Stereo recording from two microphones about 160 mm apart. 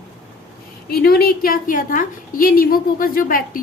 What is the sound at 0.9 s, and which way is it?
A woman's voice, 75° left (ahead or behind).